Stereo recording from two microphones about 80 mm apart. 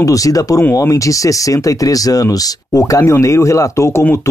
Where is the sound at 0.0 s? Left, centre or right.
Left.